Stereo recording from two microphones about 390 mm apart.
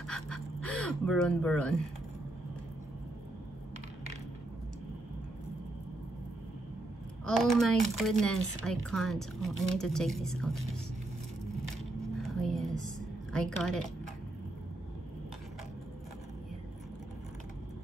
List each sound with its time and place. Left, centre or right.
0.0 s gasp: centre
0.8 s speech: centre
7.2 s speech: centre
12.2 s a sound: centre
13.3 s a woman's voice: centre